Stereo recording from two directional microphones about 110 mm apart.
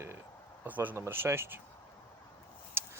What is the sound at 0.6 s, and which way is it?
Speech, 15° right (ahead or behind).